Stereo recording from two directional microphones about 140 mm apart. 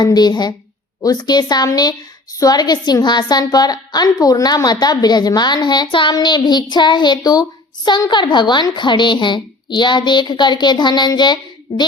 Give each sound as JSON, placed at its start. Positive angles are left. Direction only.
{"t": 0.0, "sound": "a woman's voice", "side_deg": 30}